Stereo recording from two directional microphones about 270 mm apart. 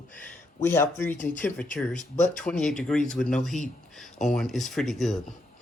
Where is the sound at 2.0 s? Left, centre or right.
Left.